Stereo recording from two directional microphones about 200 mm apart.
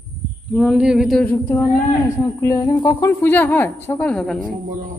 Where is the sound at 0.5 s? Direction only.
5° right (ahead or behind).